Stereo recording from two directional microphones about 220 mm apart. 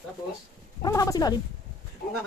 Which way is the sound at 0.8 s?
15° left (ahead or behind).